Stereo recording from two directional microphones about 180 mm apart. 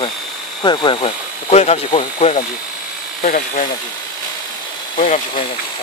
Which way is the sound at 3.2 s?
45° left (ahead or behind).